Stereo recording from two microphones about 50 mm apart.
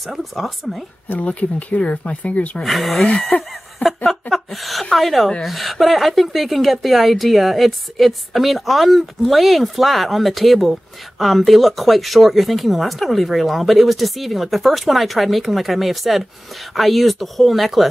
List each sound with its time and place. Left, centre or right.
0.0 s speech: centre
1.0 s speech: left
2.6 s speech: centre
3.0 s speech: left
3.8 s speech: centre